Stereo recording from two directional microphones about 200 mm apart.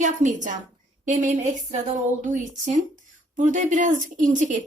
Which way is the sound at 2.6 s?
35° right (ahead or behind).